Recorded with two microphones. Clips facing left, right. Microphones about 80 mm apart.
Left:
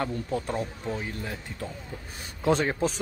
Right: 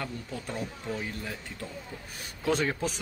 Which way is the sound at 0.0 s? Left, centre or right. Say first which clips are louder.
Left 7 dB; left.